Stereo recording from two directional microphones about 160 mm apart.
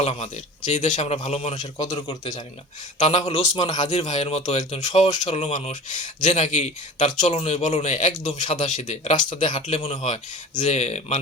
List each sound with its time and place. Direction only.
0.0 s speech: 40° left (ahead or behind)
2.0 s a man's voice: 20° left (ahead or behind)
3.0 s a man's voice: 40° left (ahead or behind)
3.4 s a man's voice: 20° left (ahead or behind)
3.7 s speech: 45° left (ahead or behind)